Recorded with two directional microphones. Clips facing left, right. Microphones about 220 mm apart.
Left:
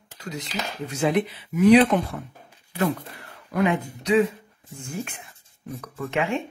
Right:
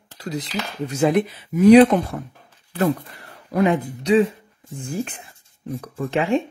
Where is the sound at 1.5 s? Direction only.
40° right (ahead or behind).